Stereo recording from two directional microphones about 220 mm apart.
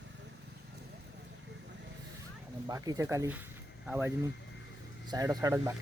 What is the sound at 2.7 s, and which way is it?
Speech, 15° right (ahead or behind).